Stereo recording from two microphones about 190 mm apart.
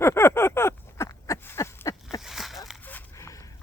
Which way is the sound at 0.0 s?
15° left (ahead or behind).